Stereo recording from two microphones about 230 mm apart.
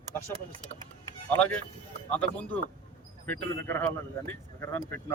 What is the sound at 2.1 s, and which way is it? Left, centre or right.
Speech, centre.